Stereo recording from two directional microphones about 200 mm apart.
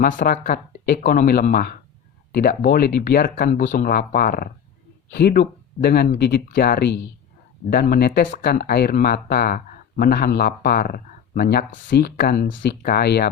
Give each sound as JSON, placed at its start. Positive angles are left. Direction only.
{"t": 0.0, "sound": "speech", "side_deg": 45}
{"t": 12.5, "sound": "speech", "side_deg": 55}